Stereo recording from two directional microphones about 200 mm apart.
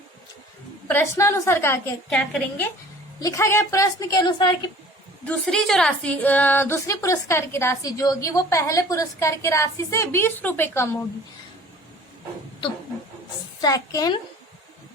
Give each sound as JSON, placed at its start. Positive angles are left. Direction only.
{"t": 0.9, "sound": "a woman's voice", "side_deg": 10}
{"t": 3.2, "sound": "a woman's voice", "side_deg": 15}
{"t": 5.2, "sound": "a woman's voice", "side_deg": 5}
{"t": 13.6, "sound": "a woman's voice", "side_deg": 20}